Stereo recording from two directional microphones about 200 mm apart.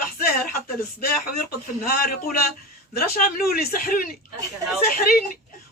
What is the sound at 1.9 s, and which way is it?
Speech, 50° left (ahead or behind).